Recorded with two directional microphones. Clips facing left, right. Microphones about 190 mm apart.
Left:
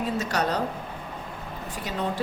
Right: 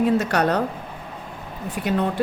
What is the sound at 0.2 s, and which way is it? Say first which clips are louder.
Speech: right 5 dB; 60° right (ahead or behind).